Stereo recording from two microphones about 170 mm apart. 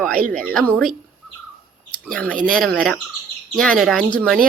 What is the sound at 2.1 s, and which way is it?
Speech, 10° left (ahead or behind).